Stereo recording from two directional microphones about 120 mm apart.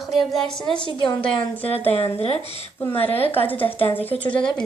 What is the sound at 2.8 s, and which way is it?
Speech, 15° left (ahead or behind).